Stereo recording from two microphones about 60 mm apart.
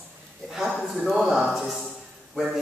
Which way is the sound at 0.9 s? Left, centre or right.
Centre.